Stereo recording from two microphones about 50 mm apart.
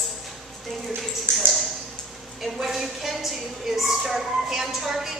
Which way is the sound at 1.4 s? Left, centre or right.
Centre.